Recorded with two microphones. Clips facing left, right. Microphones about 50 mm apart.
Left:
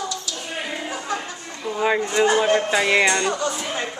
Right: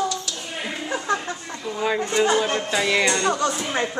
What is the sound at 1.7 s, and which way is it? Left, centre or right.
Speech, centre.